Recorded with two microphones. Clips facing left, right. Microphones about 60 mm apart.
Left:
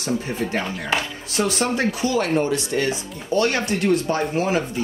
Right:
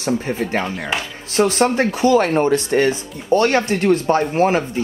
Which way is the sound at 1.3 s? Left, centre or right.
Right.